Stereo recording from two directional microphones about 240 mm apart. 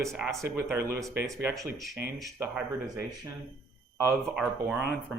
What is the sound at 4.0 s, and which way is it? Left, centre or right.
Speech, centre.